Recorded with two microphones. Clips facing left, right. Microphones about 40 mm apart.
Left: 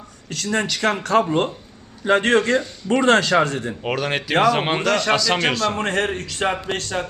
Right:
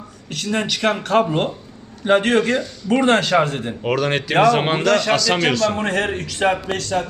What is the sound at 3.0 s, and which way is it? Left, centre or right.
Speech, left.